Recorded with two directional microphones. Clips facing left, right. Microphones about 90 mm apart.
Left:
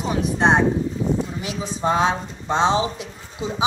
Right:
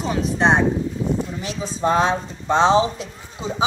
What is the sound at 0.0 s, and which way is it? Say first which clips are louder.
A woman's voice: even; 15° left (ahead or behind).